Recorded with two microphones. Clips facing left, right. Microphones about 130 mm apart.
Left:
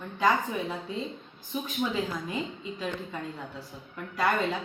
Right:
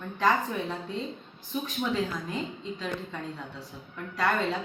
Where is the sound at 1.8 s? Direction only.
10° left (ahead or behind).